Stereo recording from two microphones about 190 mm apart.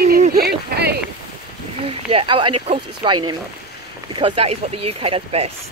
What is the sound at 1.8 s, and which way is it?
Speech, 30° right (ahead or behind).